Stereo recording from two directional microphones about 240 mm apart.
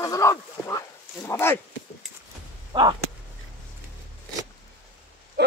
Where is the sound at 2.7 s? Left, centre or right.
Centre.